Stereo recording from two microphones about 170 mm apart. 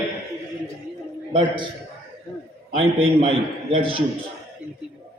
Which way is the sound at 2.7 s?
35° right (ahead or behind).